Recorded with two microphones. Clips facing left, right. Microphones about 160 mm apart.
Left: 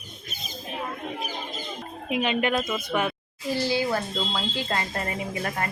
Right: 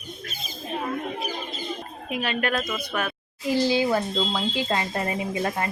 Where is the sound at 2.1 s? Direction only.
20° left (ahead or behind).